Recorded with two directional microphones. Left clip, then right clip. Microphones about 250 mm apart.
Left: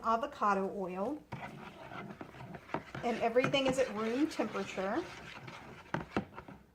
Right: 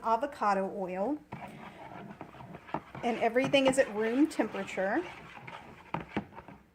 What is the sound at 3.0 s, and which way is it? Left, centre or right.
A woman's voice, right.